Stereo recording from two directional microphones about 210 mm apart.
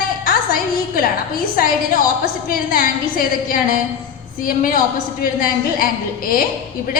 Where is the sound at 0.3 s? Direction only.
45° left (ahead or behind).